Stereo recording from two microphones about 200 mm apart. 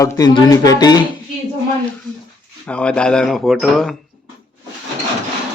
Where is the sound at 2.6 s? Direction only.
5° left (ahead or behind).